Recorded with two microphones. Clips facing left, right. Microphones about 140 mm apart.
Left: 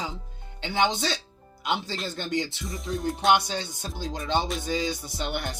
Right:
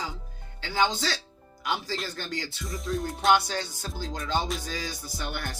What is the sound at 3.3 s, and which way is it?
Speech, 20° left (ahead or behind).